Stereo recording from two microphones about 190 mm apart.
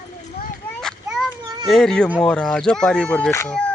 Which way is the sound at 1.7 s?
Centre (ahead or behind).